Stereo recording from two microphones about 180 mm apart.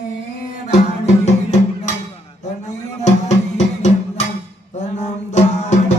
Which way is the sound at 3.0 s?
40° left (ahead or behind).